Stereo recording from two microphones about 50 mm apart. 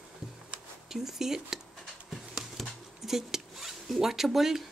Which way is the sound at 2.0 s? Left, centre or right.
Centre.